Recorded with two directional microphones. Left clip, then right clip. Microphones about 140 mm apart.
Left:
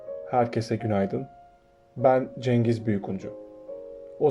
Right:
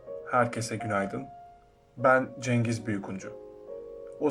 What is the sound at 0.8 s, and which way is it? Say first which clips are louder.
Speech: left 1 dB; 65° left (ahead or behind).